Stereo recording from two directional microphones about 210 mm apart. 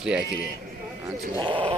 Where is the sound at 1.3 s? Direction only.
25° right (ahead or behind).